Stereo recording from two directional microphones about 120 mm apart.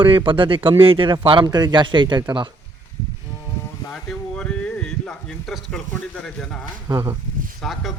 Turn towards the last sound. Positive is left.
turn(degrees=0)  # may be behind; listen again after turning